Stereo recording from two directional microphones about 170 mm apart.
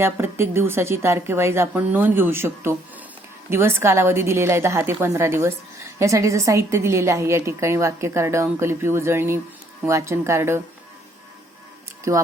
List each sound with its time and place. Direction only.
0.0 s a woman's voice: 15° right (ahead or behind)
12.1 s a woman's voice: 20° right (ahead or behind)